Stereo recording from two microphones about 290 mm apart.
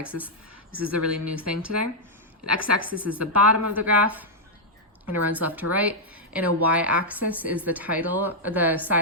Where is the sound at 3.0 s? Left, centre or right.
Centre.